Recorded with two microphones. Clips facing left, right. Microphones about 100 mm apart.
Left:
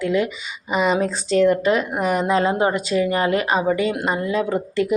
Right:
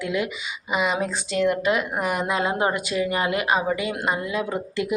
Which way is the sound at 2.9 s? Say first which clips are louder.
Left 6 dB; 35° left (ahead or behind).